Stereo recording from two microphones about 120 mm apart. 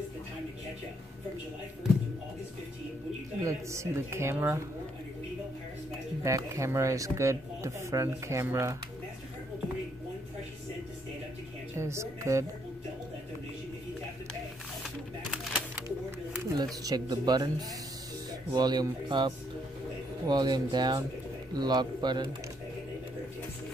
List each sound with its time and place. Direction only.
3.4 s speech: 25° right (ahead or behind)
6.2 s speech: 25° right (ahead or behind)
11.7 s speech: 25° right (ahead or behind)
15.3 s a sound: centre (ahead or behind)
16.8 s speech: 30° right (ahead or behind)